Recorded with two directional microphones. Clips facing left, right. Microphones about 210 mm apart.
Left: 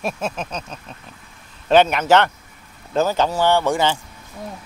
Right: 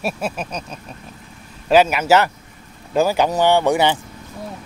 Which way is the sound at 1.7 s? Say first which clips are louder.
Even; 5° right (ahead or behind).